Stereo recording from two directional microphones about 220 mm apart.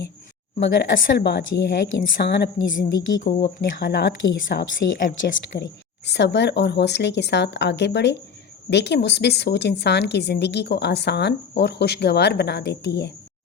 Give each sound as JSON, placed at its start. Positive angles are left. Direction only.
{"t": 0.6, "sound": "a woman's voice", "side_deg": 50}
{"t": 3.2, "sound": "speech", "side_deg": 30}
{"t": 3.8, "sound": "a woman's voice", "side_deg": 50}